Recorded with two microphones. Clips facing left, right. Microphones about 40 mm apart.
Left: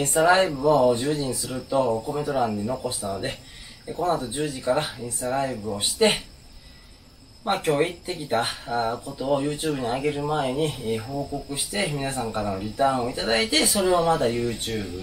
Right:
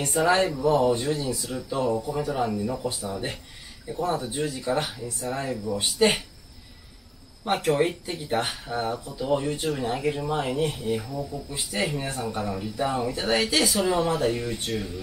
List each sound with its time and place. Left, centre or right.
0.0 s speech: centre
5.6 s speech: left
5.9 s speech: centre
7.4 s speech: centre